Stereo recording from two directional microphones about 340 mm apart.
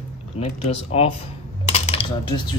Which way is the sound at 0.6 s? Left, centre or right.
Centre.